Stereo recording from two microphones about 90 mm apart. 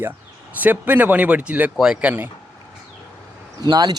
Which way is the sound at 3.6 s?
50° right (ahead or behind).